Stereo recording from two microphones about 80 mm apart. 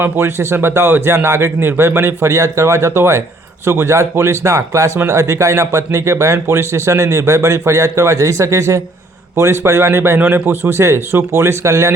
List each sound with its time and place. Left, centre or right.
0.0 s speech: right